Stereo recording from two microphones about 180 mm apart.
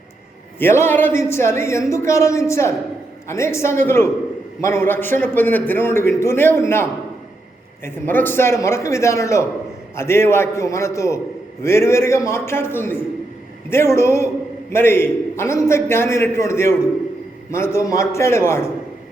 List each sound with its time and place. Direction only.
0.6 s a man's voice: 15° left (ahead or behind)
7.9 s a man's voice: 10° left (ahead or behind)